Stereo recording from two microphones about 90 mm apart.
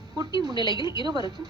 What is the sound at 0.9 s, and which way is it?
Speech, 50° right (ahead or behind).